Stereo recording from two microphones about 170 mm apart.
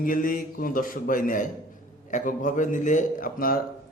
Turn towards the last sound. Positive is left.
turn(degrees=55)  # may be behind; listen again after turning